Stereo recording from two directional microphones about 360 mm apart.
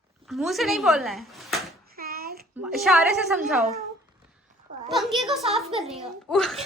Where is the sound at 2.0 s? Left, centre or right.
Right.